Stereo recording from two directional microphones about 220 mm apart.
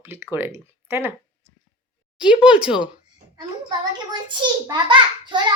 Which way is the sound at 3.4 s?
20° right (ahead or behind).